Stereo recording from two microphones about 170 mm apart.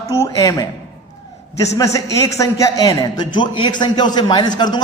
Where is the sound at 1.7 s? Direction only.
20° left (ahead or behind).